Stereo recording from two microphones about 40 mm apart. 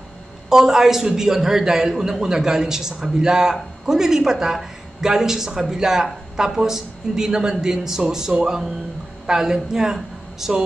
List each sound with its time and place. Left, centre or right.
0.5 s a man's voice: centre